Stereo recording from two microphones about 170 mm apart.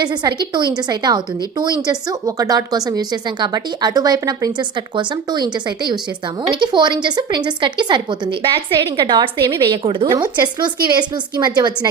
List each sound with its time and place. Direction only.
0.0 s speech: 25° right (ahead or behind)